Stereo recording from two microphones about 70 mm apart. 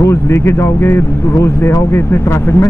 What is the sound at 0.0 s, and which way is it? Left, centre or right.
Speech, left.